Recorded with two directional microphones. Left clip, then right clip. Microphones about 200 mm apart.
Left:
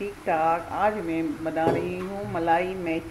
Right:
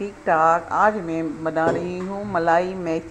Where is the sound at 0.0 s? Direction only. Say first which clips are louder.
Right 6 dB; 25° right (ahead or behind).